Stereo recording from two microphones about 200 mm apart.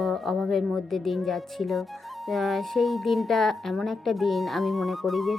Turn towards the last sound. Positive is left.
turn(degrees=0)  # may be behind; listen again after turning